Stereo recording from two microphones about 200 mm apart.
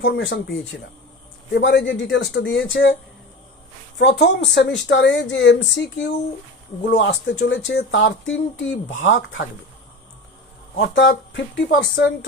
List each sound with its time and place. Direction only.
0.0 s speech: 70° left (ahead or behind)
4.0 s speech: 60° left (ahead or behind)
10.8 s speech: 60° left (ahead or behind)